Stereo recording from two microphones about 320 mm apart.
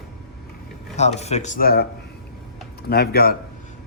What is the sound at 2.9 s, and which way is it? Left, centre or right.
Speech, left.